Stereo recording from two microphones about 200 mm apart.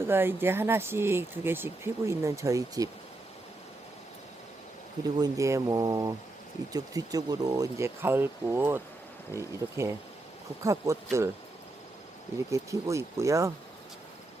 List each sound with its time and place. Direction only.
0.0 s speech: 10° right (ahead or behind)
5.1 s speech: 15° right (ahead or behind)
12.5 s speech: 15° right (ahead or behind)